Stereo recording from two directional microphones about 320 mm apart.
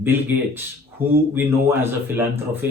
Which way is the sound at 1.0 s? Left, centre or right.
Centre.